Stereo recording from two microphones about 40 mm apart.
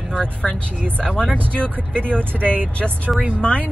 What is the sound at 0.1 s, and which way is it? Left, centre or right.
Speech, left.